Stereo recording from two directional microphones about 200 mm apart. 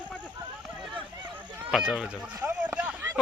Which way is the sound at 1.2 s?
5° right (ahead or behind).